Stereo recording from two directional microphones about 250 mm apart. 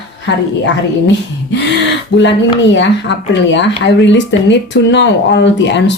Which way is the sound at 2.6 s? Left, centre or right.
Left.